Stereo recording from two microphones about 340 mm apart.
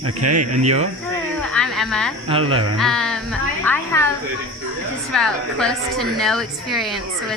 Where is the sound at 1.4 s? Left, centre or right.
Centre.